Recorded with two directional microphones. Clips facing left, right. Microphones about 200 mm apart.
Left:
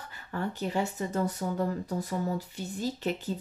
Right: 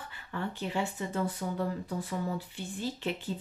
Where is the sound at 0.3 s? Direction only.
40° left (ahead or behind).